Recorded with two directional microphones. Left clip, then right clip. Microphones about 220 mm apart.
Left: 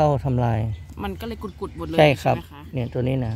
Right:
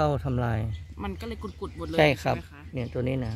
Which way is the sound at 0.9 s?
30° left (ahead or behind).